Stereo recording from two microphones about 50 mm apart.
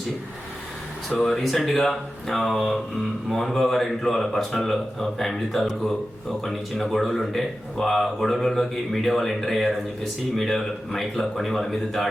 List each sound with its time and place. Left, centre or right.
1.2 s speech: centre